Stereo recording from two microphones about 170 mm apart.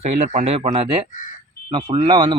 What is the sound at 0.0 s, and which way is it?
Speech, 40° right (ahead or behind).